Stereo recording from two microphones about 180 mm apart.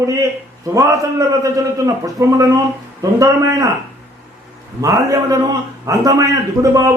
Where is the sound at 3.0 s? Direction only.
20° right (ahead or behind).